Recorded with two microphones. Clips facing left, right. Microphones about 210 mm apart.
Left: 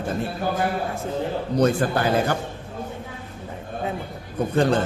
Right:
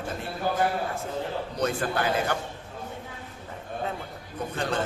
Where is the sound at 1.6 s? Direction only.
35° left (ahead or behind).